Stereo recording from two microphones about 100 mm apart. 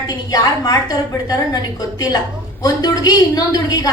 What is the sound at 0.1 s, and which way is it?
Speech, 40° left (ahead or behind).